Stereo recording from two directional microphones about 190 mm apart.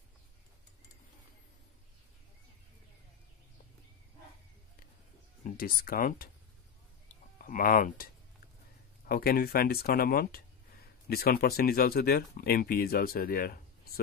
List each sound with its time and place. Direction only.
5.4 s speech: 50° left (ahead or behind)
7.3 s speech: 45° left (ahead or behind)